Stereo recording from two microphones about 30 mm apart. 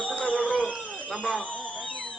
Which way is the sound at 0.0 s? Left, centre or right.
Left.